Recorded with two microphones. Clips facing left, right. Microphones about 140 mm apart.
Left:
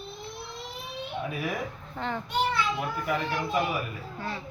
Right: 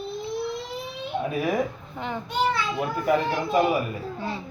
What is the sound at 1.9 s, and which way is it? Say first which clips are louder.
Speech: right 1 dB; 15° right (ahead or behind).